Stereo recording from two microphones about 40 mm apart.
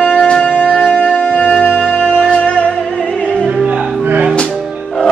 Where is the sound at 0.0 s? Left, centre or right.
Left.